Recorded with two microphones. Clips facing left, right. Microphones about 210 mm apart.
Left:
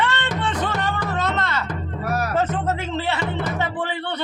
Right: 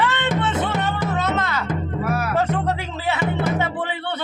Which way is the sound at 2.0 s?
40° left (ahead or behind).